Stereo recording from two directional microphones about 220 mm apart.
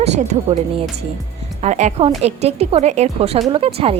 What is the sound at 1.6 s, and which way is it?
A woman's voice, 30° right (ahead or behind).